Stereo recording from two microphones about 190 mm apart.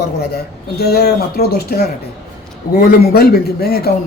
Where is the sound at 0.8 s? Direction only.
55° left (ahead or behind).